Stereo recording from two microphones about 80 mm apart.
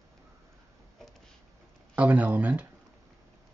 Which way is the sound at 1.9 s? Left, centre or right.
Centre.